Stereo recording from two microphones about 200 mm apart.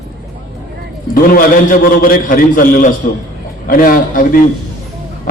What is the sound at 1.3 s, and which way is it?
A man's voice, 45° left (ahead or behind).